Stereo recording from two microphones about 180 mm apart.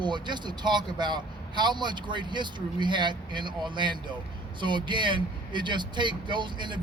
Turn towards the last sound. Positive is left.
turn(degrees=-25)  # may be behind; listen again after turning